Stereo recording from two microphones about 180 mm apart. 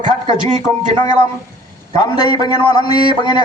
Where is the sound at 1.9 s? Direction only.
20° left (ahead or behind).